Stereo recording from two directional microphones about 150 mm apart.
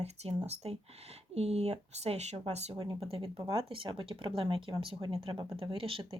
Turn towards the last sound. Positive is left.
turn(degrees=-35)  # may be behind; listen again after turning